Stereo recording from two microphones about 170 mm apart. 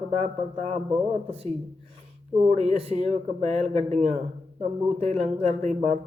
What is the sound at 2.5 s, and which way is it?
Speech, 35° right (ahead or behind).